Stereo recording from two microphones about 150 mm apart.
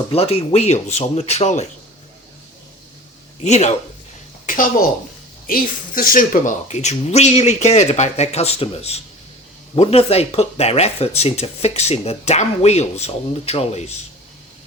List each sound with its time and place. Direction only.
0.1 s speech: 40° left (ahead or behind)
3.4 s speech: 50° left (ahead or behind)
4.4 s a sound: 65° left (ahead or behind)
5.5 s speech: 75° left (ahead or behind); by 14.0 s 45° left (ahead or behind)